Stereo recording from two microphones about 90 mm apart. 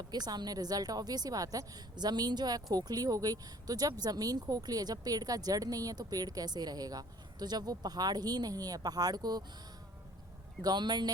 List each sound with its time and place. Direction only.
0.1 s a woman's voice: 50° right (ahead or behind)
10.6 s a woman's voice: 50° right (ahead or behind)